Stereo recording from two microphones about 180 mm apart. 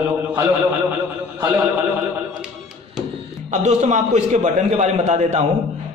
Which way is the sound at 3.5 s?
40° right (ahead or behind).